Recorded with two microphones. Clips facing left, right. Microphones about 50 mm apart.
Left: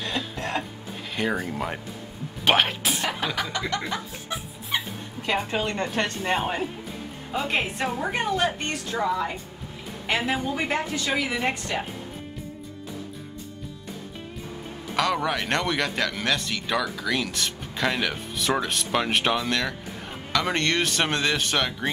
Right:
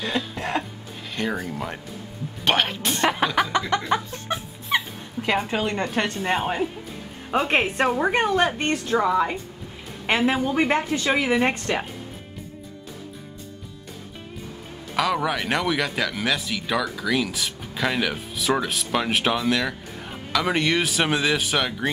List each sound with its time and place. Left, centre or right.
0.2 s cough: centre
1.1 s speech: centre
3.5 s a woman's voice: right
4.7 s dog: centre
5.9 s speech: centre
7.2 s a woman's voice: right; by 10.7 s centre
10.7 s a woman's voice: right
15.0 s speech: centre